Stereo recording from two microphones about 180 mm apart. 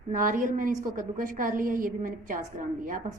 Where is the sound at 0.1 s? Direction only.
50° right (ahead or behind).